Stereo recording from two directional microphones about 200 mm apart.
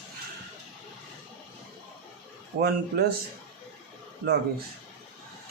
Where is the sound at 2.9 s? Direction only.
50° right (ahead or behind).